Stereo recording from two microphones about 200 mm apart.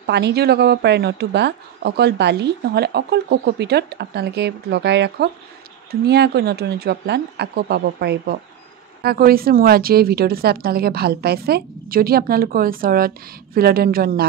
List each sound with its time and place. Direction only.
0.0 s a woman's voice: 55° right (ahead or behind)